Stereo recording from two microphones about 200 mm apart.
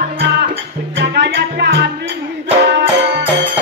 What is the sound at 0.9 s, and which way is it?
Music, 60° right (ahead or behind).